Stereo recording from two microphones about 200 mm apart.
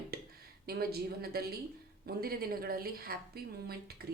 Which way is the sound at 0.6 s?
50° right (ahead or behind).